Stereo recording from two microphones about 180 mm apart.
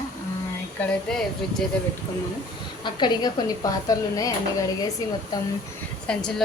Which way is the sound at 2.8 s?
25° left (ahead or behind).